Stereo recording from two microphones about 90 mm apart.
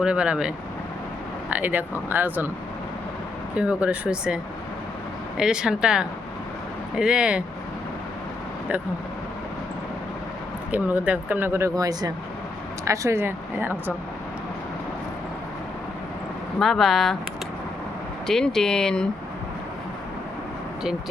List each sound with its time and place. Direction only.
0.0 s speech: 10° right (ahead or behind)
3.5 s speech: 15° right (ahead or behind)
5.4 s speech: 10° right (ahead or behind)
10.7 s speech: 20° right (ahead or behind)
11.8 s speech: 45° right (ahead or behind); by 13.9 s 25° right (ahead or behind)
16.6 s speech: centre (ahead or behind)
18.3 s speech: 5° left (ahead or behind)